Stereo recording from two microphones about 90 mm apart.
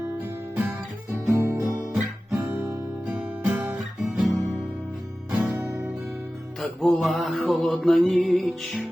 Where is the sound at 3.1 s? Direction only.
10° right (ahead or behind).